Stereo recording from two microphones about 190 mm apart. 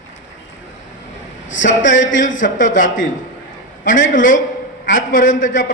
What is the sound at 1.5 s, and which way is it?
Speech, 75° left (ahead or behind).